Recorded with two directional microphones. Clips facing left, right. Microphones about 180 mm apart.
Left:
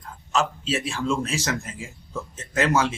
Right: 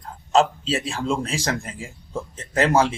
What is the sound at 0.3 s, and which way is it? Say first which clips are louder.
A man's voice: right 5 dB; 35° right (ahead or behind).